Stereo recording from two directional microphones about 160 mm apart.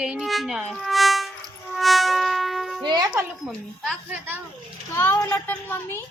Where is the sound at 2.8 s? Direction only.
25° right (ahead or behind).